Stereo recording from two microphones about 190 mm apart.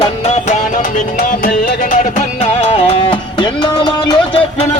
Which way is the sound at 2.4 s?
30° left (ahead or behind).